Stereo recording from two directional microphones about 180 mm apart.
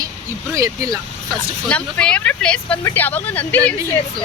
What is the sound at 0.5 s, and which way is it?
Speech, 20° right (ahead or behind).